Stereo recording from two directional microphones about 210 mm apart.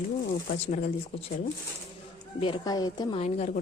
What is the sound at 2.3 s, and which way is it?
A woman's voice, 25° left (ahead or behind).